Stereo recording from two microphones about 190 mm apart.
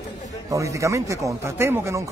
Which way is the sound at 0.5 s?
15° right (ahead or behind).